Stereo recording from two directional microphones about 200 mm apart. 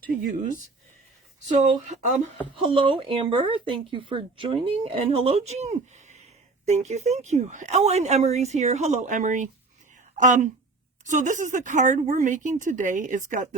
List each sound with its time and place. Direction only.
0.1 s speech: 45° right (ahead or behind)
1.5 s speech: 35° right (ahead or behind)
2.6 s speech: 25° right (ahead or behind)